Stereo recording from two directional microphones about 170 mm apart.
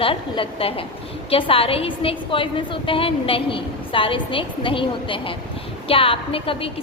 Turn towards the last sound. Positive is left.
turn(degrees=30)  # may be behind; listen again after turning